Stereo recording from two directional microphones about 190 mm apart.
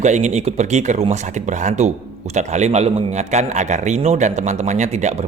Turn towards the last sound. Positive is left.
turn(degrees=-35)  # may be behind; listen again after turning